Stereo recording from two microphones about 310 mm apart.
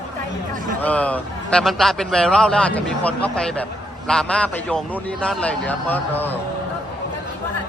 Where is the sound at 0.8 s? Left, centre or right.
Centre.